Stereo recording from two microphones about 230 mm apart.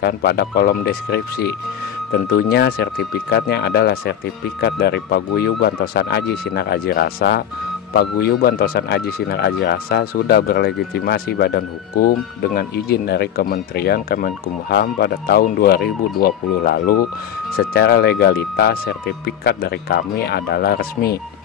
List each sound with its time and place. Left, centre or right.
0.0 s speech: left